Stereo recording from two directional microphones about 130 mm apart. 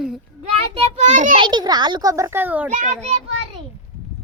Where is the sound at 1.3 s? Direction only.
35° right (ahead or behind).